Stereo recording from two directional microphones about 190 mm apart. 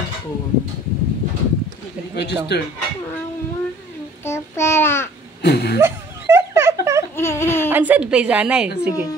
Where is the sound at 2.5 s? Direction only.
60° left (ahead or behind).